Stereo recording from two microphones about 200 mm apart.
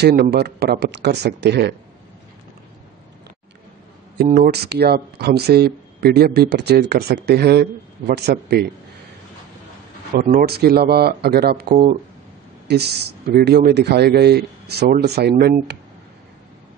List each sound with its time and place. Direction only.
0.0 s speech: 55° right (ahead or behind)
4.2 s speech: 50° right (ahead or behind)
10.1 s speech: 45° right (ahead or behind)